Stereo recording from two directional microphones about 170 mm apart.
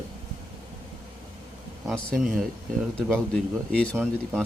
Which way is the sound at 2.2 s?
50° right (ahead or behind).